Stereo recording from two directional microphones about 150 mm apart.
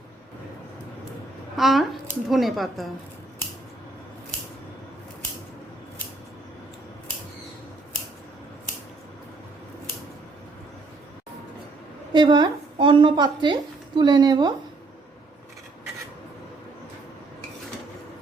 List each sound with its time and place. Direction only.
1.5 s speech: centre (ahead or behind)
12.1 s speech: 30° right (ahead or behind)